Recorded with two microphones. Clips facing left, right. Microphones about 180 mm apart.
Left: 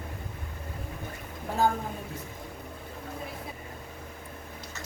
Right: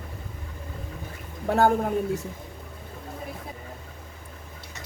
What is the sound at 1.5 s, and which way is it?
Speech, 70° right (ahead or behind).